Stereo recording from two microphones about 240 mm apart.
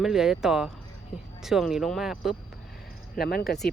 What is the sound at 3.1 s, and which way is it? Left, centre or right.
Speech, left.